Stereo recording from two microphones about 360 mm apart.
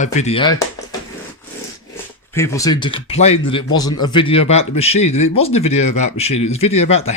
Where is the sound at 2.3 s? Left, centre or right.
Centre.